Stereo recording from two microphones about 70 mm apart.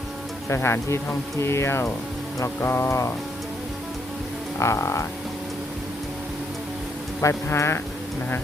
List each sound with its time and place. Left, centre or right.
0.4 s speech: left
4.6 s speech: left
7.2 s speech: left